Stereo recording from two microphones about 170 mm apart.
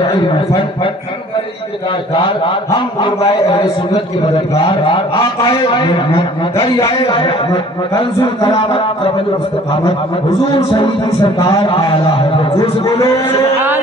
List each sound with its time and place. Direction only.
0.0 s a man's voice: 30° left (ahead or behind)
2.1 s a man's voice: 25° left (ahead or behind)
7.0 s a man's voice: 30° left (ahead or behind)
10.5 s a man's voice: 30° left (ahead or behind)
12.8 s a man's voice: 15° left (ahead or behind)